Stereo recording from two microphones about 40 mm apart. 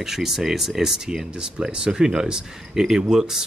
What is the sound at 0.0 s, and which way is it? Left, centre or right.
Speech, centre.